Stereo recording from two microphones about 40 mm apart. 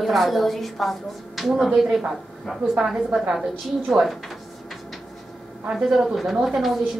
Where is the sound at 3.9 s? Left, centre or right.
Centre.